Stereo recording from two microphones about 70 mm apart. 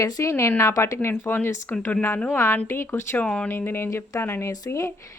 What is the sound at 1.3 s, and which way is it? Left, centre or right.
Speech, left.